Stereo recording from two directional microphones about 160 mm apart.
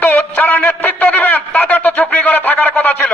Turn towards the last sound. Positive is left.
turn(degrees=10)  # may be behind; listen again after turning